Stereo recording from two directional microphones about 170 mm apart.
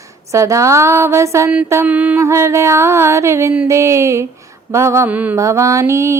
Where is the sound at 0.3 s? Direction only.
20° right (ahead or behind).